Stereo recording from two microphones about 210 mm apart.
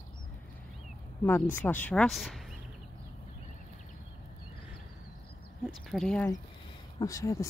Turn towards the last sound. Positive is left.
turn(degrees=15)  # may be behind; listen again after turning